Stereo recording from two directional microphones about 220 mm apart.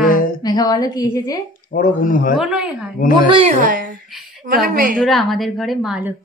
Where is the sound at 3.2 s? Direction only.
25° right (ahead or behind).